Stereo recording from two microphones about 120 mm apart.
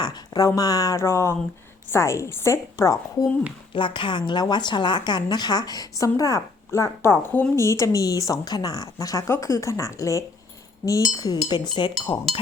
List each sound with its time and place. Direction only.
0.0 s speech: 30° left (ahead or behind)
3.8 s a woman's voice: 45° left (ahead or behind)